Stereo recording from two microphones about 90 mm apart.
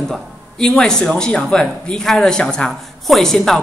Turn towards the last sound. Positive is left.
turn(degrees=5)  # may be behind; listen again after turning